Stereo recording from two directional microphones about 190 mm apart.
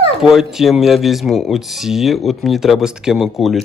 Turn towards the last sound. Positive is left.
turn(degrees=0)  # may be behind; listen again after turning